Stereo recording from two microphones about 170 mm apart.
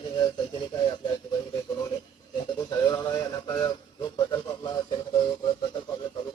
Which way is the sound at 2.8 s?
20° left (ahead or behind).